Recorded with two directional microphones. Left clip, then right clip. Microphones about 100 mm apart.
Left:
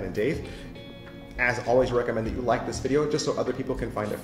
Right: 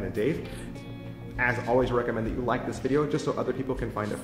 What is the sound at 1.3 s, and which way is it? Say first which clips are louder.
Speech: left 2 dB; 40° right (ahead or behind).